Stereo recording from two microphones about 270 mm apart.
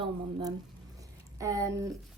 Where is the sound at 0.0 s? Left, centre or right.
Centre.